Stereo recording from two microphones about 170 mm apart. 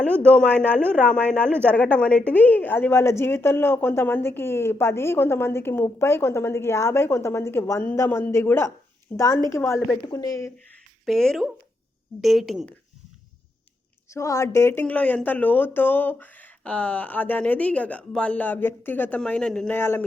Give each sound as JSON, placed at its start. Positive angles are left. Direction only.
{"t": 0.0, "sound": "a woman's voice", "side_deg": 5}
{"t": 11.0, "sound": "speech", "side_deg": 0}
{"t": 14.1, "sound": "a woman's voice", "side_deg": 15}